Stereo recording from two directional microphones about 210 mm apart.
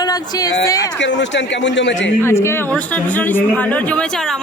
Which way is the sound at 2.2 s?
10° left (ahead or behind).